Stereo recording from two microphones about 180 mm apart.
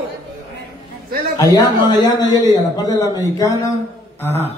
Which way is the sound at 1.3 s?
20° left (ahead or behind).